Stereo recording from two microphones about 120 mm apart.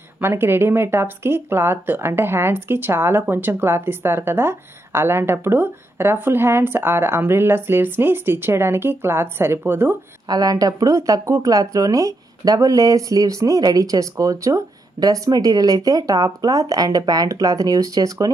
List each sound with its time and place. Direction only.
0.2 s speech: 20° right (ahead or behind)
10.2 s speech: 35° right (ahead or behind)